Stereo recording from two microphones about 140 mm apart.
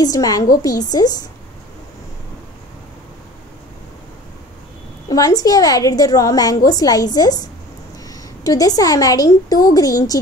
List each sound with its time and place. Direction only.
0.0 s a woman's voice: 25° left (ahead or behind)
5.1 s a woman's voice: 25° left (ahead or behind)